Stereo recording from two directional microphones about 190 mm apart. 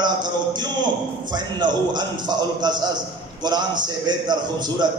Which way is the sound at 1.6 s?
25° right (ahead or behind).